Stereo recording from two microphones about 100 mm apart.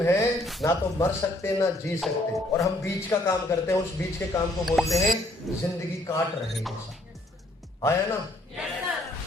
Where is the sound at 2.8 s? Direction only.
30° left (ahead or behind).